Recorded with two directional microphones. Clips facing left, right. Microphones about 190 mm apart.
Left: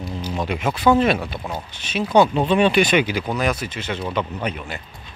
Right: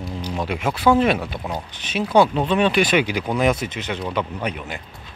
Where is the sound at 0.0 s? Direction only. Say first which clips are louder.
Left 1 dB; centre (ahead or behind).